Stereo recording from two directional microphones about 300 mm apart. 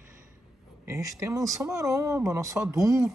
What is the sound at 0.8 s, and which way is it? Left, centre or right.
Speech, centre.